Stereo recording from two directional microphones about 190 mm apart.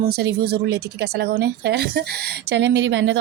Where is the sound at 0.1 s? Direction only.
60° right (ahead or behind).